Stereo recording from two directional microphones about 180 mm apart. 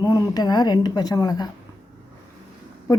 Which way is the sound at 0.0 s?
20° left (ahead or behind).